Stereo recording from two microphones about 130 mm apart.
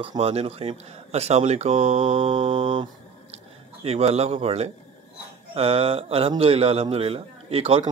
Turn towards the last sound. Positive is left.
turn(degrees=-50)  # may be behind; listen again after turning